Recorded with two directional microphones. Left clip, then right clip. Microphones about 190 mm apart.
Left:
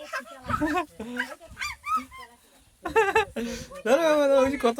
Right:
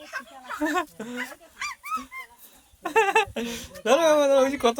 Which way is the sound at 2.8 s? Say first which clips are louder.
Right 1 dB; 5° left (ahead or behind).